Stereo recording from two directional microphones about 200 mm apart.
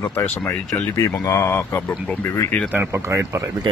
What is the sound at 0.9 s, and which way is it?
Speech, 15° left (ahead or behind).